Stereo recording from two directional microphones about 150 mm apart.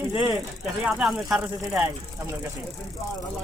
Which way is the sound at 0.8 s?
5° right (ahead or behind).